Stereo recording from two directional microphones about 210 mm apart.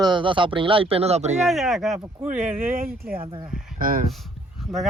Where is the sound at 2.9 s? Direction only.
45° right (ahead or behind).